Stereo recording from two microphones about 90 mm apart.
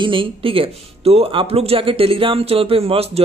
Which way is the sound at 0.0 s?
75° right (ahead or behind).